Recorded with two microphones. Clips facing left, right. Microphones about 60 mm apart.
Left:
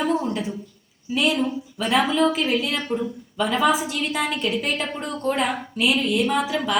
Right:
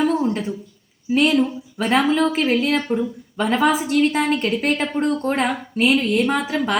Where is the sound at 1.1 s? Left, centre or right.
Right.